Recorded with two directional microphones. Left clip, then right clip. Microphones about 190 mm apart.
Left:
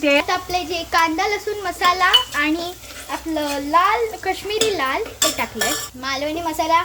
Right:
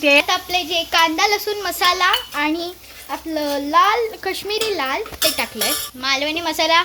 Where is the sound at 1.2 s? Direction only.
20° right (ahead or behind).